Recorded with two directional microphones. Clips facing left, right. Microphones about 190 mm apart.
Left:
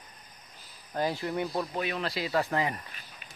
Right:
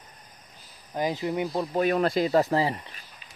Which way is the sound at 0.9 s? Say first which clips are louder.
Right 3 dB; 15° right (ahead or behind).